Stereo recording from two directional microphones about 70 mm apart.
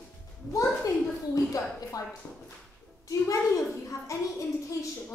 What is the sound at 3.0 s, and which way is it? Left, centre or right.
Speech, left.